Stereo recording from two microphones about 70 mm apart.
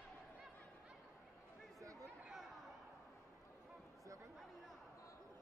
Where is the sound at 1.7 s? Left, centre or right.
Right.